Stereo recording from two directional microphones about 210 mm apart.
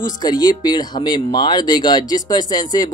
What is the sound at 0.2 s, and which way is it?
Speech, 20° left (ahead or behind).